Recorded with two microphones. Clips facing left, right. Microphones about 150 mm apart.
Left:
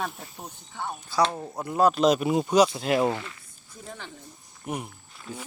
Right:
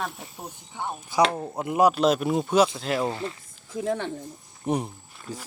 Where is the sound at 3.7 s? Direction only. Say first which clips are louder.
Right 14 dB; 80° right.